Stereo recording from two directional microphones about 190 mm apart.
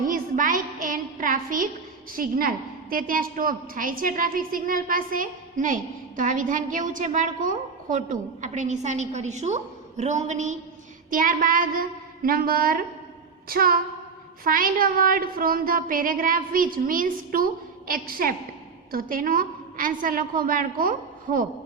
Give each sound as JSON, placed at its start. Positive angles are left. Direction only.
{"t": 0.0, "sound": "a woman's voice", "side_deg": -45}